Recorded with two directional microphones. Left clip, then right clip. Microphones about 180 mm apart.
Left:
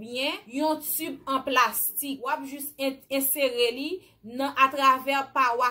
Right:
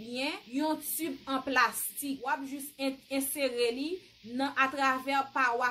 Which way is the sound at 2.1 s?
Centre (ahead or behind).